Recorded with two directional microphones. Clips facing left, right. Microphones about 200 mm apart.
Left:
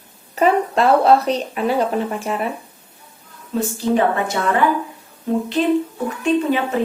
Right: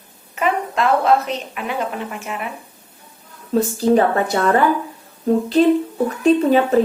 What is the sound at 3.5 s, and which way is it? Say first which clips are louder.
Speech: right 4 dB; 35° right (ahead or behind).